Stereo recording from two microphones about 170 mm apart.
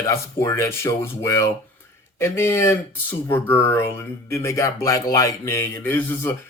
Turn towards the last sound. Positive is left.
turn(degrees=15)  # may be behind; listen again after turning